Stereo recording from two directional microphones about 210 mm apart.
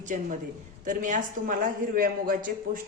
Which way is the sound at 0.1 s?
40° right (ahead or behind).